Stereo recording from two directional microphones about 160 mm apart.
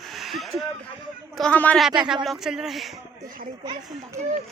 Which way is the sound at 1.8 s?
5° right (ahead or behind).